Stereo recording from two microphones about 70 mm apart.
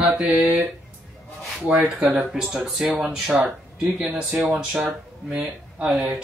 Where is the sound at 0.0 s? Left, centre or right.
Centre.